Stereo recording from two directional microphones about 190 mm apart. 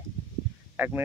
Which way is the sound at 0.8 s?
10° right (ahead or behind).